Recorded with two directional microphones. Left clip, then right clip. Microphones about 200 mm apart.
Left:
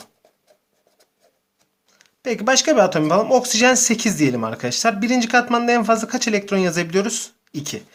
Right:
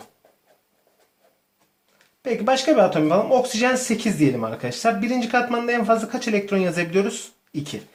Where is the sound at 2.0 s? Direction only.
15° left (ahead or behind).